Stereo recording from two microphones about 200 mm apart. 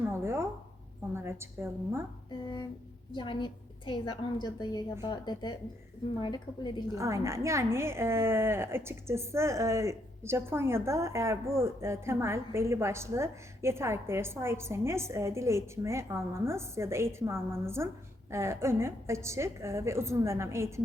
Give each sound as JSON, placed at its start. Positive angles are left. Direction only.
{"t": 0.1, "sound": "a woman's voice", "side_deg": -10}
{"t": 3.1, "sound": "a woman's voice", "side_deg": 25}
{"t": 6.9, "sound": "a woman's voice", "side_deg": -15}